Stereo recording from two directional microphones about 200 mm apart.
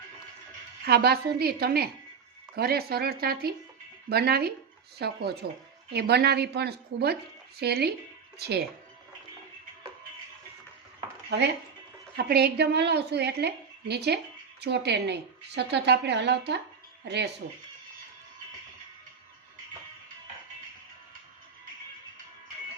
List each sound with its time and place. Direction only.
0.9 s a woman's voice: 50° right (ahead or behind)
11.3 s a woman's voice: 55° right (ahead or behind)